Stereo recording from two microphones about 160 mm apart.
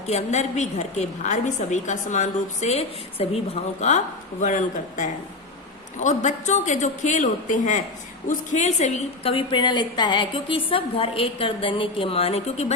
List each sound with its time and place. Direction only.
0.1 s a woman's voice: 45° left (ahead or behind)